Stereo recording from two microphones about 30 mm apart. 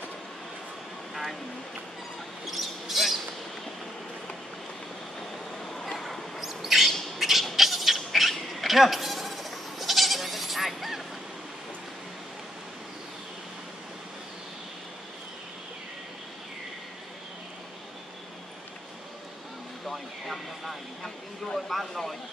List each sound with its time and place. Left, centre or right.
2.4 s basketball bounce: centre
5.7 s bow-wow: centre
6.3 s bird: centre
7.2 s a sound: centre
7.5 s insect: centre
19.9 s a sound: centre